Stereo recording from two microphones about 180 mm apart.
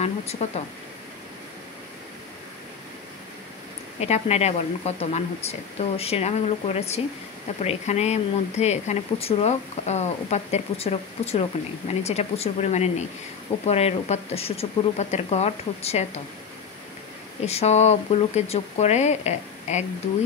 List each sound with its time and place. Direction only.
0.0 s a sound: 35° left (ahead or behind)
4.0 s speech: 35° left (ahead or behind)
17.5 s speech: 35° left (ahead or behind)